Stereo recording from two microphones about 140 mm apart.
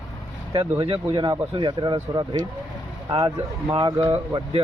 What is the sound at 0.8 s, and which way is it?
Speech, 35° right (ahead or behind).